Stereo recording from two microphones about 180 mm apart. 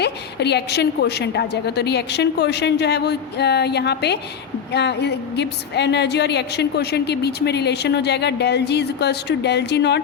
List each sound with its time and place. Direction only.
0.0 s a woman's voice: 65° left (ahead or behind)